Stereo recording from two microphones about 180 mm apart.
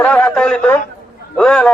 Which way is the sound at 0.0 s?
5° left (ahead or behind).